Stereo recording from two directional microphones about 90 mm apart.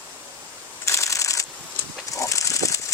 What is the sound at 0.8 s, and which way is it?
Shuffling cards, 35° left (ahead or behind).